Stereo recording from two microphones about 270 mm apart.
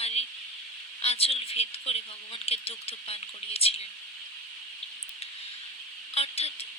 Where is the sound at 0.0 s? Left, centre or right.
Left.